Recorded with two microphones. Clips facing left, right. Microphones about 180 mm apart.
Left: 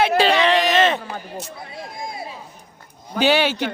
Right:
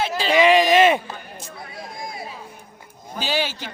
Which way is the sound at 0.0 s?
65° left (ahead or behind).